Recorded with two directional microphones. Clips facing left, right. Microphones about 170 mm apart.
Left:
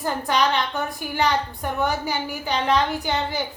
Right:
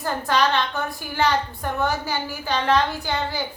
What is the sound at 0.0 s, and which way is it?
A woman's voice, 15° left (ahead or behind).